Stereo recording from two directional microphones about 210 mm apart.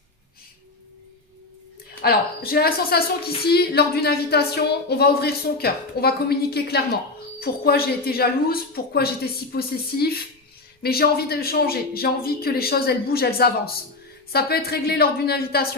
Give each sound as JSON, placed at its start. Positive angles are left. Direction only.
{"t": 2.0, "sound": "a woman's voice", "side_deg": 45}